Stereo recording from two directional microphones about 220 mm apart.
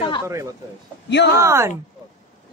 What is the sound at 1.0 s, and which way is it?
Speech, 50° left (ahead or behind).